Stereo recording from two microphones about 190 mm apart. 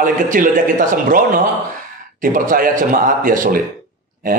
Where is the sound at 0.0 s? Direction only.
45° right (ahead or behind).